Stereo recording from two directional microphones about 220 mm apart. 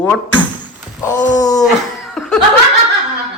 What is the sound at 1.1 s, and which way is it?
Wail, 35° left (ahead or behind).